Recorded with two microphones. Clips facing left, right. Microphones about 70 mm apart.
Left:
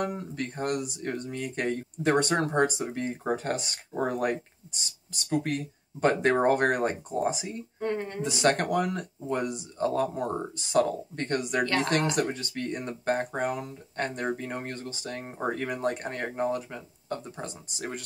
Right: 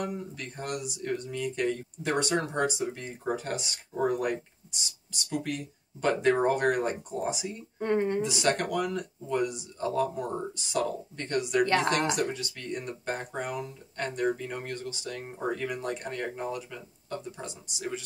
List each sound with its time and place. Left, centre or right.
0.0 s speech: left
7.8 s a woman's voice: centre
8.2 s speech: left